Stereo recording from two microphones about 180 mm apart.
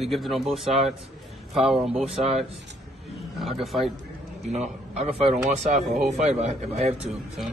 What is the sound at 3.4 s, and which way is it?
Speech, centre (ahead or behind).